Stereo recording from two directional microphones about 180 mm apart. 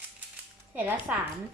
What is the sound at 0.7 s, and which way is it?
Speech, 10° right (ahead or behind).